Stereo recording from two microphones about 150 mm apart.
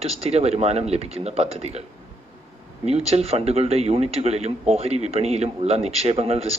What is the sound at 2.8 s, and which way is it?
A man's voice, 45° right (ahead or behind).